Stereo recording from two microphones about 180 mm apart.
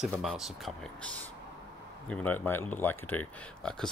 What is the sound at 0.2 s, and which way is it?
Speech, centre (ahead or behind).